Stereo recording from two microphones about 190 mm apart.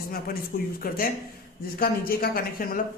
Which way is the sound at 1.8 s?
50° left (ahead or behind).